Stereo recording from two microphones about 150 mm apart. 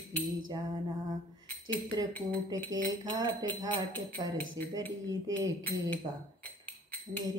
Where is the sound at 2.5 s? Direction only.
25° right (ahead or behind).